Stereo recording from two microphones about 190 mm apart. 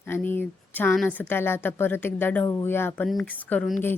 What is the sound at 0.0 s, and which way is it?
A woman's voice, 10° left (ahead or behind).